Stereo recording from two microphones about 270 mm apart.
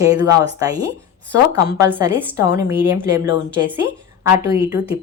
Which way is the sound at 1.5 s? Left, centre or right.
Centre.